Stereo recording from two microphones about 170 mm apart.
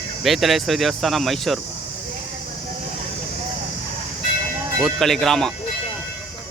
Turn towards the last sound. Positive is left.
turn(degrees=0)  # may be behind; listen again after turning